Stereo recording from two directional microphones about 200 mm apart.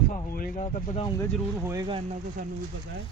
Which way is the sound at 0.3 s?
45° left (ahead or behind).